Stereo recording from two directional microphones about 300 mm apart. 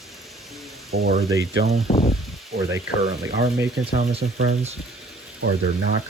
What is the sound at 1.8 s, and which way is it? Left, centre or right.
Speech, centre.